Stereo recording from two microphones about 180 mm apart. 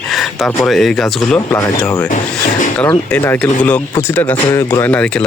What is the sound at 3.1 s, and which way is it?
Speech, 10° left (ahead or behind).